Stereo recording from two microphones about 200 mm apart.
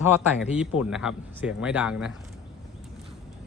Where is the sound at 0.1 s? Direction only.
5° right (ahead or behind).